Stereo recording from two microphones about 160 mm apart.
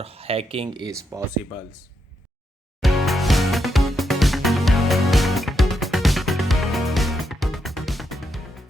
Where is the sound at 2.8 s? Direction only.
Centre (ahead or behind).